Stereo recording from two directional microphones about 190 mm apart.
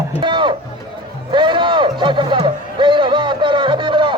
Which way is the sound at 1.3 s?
25° right (ahead or behind).